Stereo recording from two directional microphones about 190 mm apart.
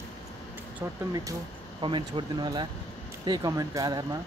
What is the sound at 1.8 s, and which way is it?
Speech, 25° right (ahead or behind).